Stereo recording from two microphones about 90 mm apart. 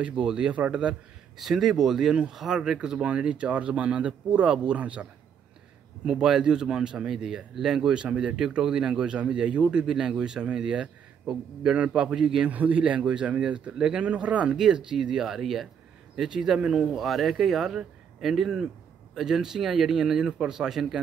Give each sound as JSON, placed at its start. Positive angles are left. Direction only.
{"t": 0.0, "sound": "speech", "side_deg": -10}
{"t": 6.0, "sound": "speech", "side_deg": -5}